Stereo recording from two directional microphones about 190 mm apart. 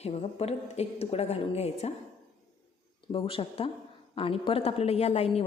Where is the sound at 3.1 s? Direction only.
30° left (ahead or behind).